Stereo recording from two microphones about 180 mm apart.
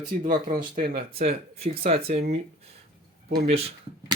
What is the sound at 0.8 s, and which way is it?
Speech, 30° right (ahead or behind).